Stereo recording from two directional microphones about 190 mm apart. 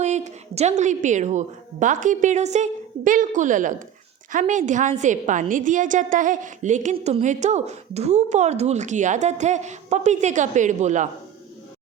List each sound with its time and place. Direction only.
0.0 s a woman's voice: 35° right (ahead or behind)